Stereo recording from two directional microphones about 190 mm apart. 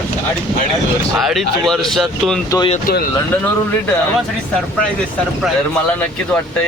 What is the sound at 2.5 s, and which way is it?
Speech, 20° left (ahead or behind).